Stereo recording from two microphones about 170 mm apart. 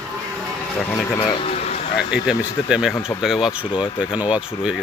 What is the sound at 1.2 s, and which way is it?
Vehicle, 30° left (ahead or behind).